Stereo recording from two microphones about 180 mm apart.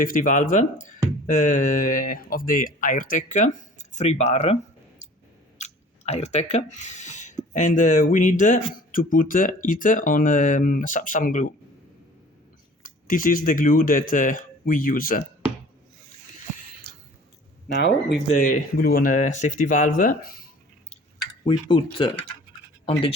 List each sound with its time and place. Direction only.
0.0 s speech: 45° left (ahead or behind)
5.5 s speech: 40° left (ahead or behind)
12.8 s speech: 50° left (ahead or behind)
17.7 s speech: 70° left (ahead or behind)
18.3 s speech: 45° left (ahead or behind)
21.5 s speech: 30° left (ahead or behind)